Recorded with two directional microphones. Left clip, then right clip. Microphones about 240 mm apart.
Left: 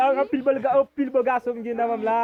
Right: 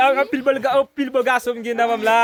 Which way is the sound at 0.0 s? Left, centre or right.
Centre.